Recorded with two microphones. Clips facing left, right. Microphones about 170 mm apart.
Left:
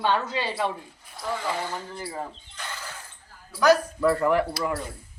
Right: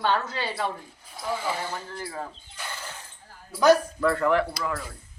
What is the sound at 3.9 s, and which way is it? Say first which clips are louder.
Speech: left 1 dB; 10° left (ahead or behind).